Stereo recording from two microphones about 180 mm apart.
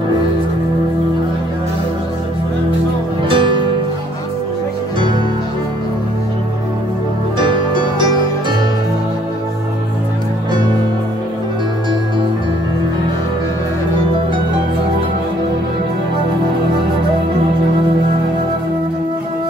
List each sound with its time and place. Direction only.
3.3 s music: 30° right (ahead or behind)
7.3 s music: 25° right (ahead or behind)